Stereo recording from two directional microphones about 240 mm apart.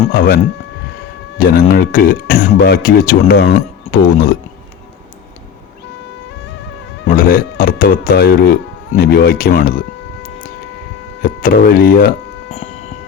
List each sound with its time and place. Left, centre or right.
0.1 s speech: left
1.4 s speech: left
3.5 s music: left
7.1 s speech: left
11.2 s speech: left